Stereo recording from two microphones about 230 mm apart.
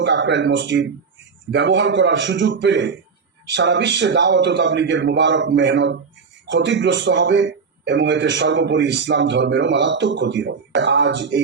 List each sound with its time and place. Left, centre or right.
0.0 s a man's voice: right